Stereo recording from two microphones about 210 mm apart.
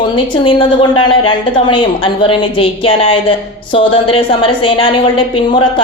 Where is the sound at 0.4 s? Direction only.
25° left (ahead or behind).